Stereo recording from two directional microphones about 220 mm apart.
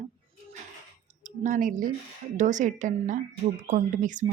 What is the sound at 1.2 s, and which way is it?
Speech, 35° right (ahead or behind).